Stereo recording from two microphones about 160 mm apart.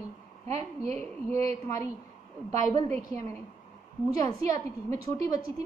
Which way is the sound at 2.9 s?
20° left (ahead or behind).